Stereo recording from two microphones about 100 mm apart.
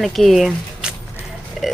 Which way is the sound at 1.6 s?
Centre (ahead or behind).